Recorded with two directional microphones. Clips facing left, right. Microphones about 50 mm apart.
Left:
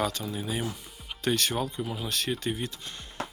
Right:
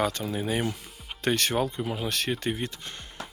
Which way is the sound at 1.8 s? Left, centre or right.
Right.